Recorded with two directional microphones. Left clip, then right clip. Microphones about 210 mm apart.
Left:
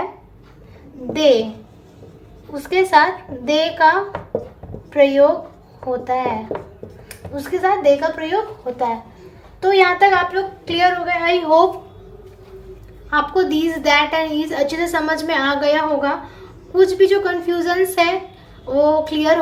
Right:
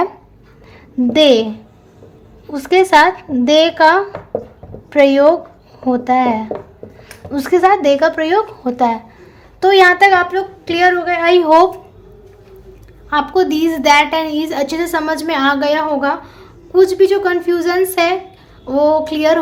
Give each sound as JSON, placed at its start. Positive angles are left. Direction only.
{"t": 1.1, "sound": "a woman's voice", "side_deg": -40}
{"t": 2.5, "sound": "a woman's voice", "side_deg": -40}
{"t": 13.1, "sound": "a woman's voice", "side_deg": -35}